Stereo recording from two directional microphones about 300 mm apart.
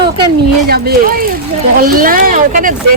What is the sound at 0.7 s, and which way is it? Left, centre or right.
Speech, right.